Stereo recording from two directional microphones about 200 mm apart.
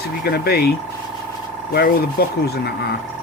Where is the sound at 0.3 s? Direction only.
55° left (ahead or behind).